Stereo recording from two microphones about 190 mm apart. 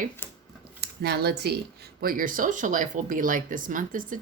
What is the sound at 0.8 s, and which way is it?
Speech, 60° right (ahead or behind).